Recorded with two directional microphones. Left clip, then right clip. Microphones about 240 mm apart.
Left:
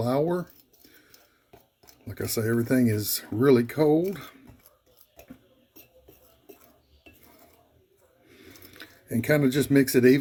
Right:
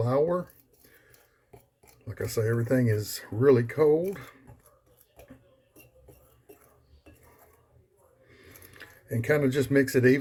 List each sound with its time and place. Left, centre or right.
0.0 s speech: left
2.0 s speech: left
8.3 s a sound: left